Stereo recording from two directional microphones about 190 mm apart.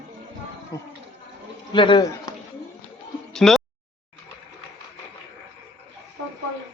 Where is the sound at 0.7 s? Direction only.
15° left (ahead or behind).